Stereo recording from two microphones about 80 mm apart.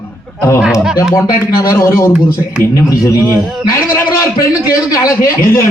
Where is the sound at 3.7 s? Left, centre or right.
Left.